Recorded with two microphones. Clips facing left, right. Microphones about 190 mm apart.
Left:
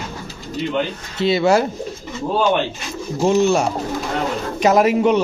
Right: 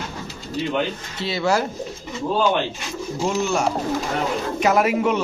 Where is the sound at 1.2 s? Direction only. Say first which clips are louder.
Left 6 dB; 20° left (ahead or behind).